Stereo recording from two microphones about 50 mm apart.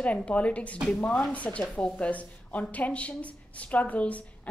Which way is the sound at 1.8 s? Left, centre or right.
Left.